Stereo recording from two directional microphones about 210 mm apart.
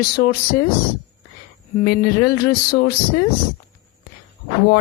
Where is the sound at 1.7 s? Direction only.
45° left (ahead or behind).